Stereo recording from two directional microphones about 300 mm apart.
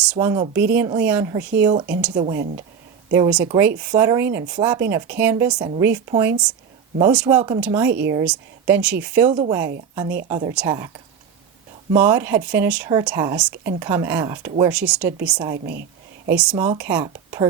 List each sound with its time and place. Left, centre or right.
0.0 s speech: centre
11.9 s speech: centre
15.5 s a woman's voice: right
16.2 s speech: centre